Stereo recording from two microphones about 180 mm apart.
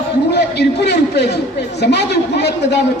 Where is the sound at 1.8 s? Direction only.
70° left (ahead or behind).